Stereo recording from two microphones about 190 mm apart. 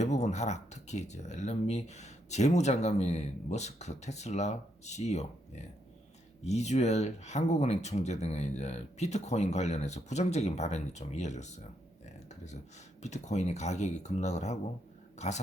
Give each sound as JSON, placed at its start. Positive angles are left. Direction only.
{"t": 0.0, "sound": "speech", "side_deg": 35}
{"t": 13.0, "sound": "speech", "side_deg": 35}
{"t": 15.1, "sound": "a sound", "side_deg": 35}